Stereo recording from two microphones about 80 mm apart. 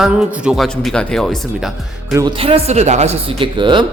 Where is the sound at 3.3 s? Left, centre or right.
Right.